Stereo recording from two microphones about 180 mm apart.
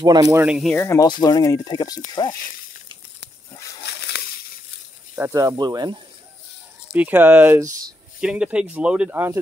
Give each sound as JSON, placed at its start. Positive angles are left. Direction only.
{"t": 0.0, "sound": "speech", "side_deg": -20}
{"t": 0.7, "sound": "speech", "side_deg": 15}
{"t": 5.1, "sound": "speech", "side_deg": -15}
{"t": 7.0, "sound": "speech", "side_deg": -10}